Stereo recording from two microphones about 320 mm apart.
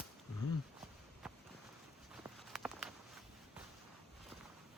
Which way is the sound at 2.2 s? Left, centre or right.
Centre.